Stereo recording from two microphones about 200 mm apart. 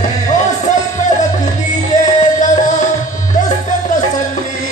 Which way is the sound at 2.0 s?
40° left (ahead or behind).